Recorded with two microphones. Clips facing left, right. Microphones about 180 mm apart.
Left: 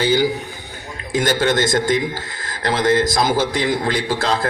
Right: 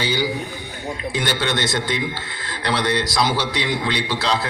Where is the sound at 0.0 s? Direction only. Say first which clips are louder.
Left 5 dB; 50° left (ahead or behind).